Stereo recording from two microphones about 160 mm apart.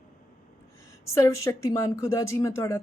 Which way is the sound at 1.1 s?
20° left (ahead or behind).